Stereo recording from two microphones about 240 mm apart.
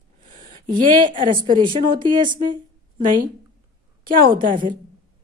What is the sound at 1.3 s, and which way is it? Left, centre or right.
Speech, centre.